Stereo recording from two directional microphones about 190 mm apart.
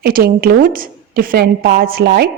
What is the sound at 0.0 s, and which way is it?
A woman's voice, 55° right (ahead or behind).